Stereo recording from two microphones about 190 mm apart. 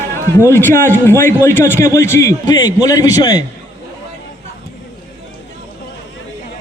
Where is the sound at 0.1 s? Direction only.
15° left (ahead or behind).